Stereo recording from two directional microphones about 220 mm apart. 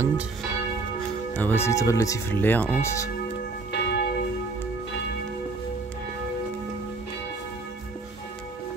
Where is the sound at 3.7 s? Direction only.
50° left (ahead or behind).